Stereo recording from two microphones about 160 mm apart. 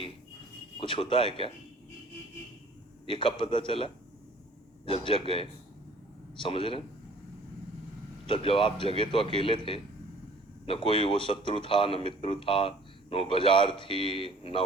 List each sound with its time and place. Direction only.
0.8 s a man's voice: 35° left (ahead or behind)
3.1 s a man's voice: 30° left (ahead or behind)
8.3 s a man's voice: 35° left (ahead or behind)
10.7 s a man's voice: 35° left (ahead or behind)